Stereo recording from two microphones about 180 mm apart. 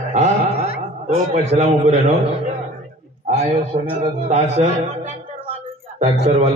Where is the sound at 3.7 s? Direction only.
50° right (ahead or behind).